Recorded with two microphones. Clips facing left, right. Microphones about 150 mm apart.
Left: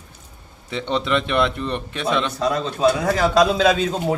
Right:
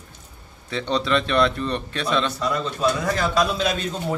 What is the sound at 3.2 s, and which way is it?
Speech, 90° left.